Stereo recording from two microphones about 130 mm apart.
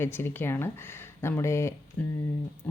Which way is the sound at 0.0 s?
15° left (ahead or behind).